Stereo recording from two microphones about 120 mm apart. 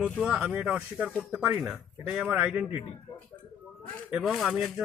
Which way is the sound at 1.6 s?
5° right (ahead or behind).